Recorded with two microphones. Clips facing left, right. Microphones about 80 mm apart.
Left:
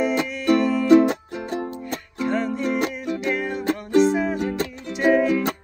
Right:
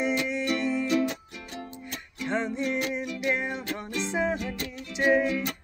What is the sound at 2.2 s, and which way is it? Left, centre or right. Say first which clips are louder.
Music: left 5 dB; right.